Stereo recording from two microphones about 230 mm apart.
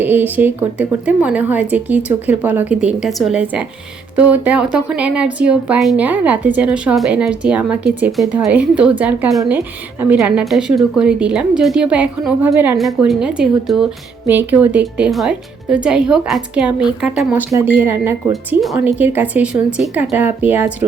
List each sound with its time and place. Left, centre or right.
0.0 s speech: centre